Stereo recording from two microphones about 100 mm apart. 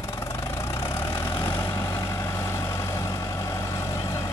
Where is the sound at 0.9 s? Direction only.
20° left (ahead or behind).